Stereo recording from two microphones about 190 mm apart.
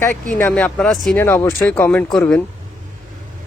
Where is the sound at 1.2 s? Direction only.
15° left (ahead or behind).